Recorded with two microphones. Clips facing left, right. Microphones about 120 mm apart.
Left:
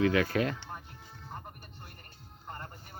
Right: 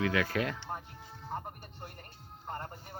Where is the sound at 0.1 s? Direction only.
Centre (ahead or behind).